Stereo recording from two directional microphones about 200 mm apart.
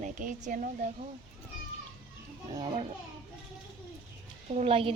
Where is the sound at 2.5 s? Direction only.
30° right (ahead or behind).